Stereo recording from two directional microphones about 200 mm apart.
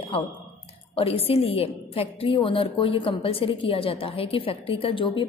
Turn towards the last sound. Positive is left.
turn(degrees=25)  # may be behind; listen again after turning